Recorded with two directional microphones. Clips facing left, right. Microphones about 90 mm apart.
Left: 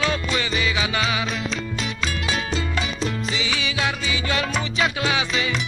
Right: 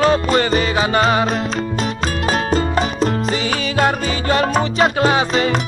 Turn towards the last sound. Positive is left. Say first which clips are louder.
# right 8 dB
turn(degrees=-45)  # may be behind; listen again after turning